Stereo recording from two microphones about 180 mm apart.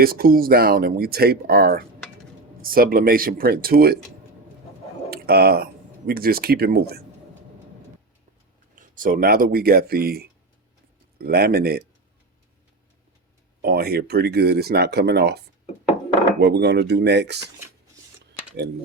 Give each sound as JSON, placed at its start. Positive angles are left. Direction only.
{"t": 0.0, "sound": "speech", "side_deg": -55}
{"t": 5.1, "sound": "speech", "side_deg": -60}
{"t": 8.8, "sound": "speech", "side_deg": -50}
{"t": 13.6, "sound": "speech", "side_deg": -60}
{"t": 16.4, "sound": "speech", "side_deg": -70}